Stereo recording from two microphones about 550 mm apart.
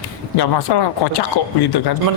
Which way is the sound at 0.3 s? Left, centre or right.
Left.